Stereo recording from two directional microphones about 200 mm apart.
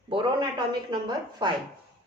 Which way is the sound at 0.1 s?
25° right (ahead or behind).